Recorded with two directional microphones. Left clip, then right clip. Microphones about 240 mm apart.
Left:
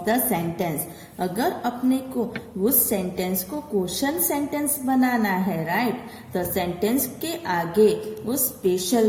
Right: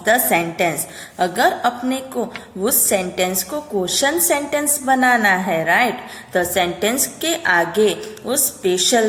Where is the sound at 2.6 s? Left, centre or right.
Centre.